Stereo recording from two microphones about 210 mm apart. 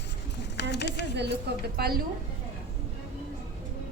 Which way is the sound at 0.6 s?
55° left (ahead or behind).